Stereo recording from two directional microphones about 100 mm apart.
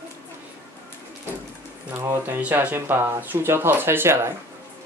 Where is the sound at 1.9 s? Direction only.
20° right (ahead or behind).